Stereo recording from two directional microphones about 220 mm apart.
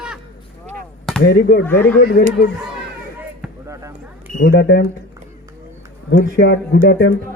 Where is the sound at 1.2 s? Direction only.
50° left (ahead or behind).